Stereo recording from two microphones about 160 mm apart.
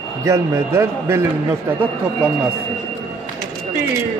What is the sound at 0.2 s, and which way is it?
A man's voice, 20° right (ahead or behind).